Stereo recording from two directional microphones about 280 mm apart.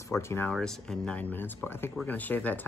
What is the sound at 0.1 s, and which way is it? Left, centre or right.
Speech, centre.